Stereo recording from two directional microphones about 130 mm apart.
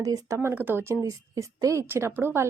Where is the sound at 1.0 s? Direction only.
25° right (ahead or behind).